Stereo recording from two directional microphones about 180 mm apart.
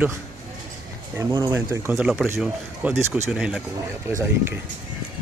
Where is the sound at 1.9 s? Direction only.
5° right (ahead or behind).